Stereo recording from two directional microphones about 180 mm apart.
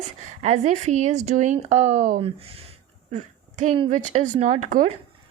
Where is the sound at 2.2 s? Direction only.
30° right (ahead or behind).